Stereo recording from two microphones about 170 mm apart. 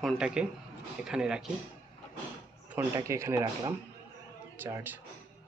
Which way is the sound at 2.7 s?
15° right (ahead or behind).